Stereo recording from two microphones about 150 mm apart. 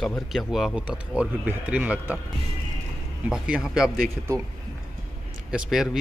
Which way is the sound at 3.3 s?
5° right (ahead or behind).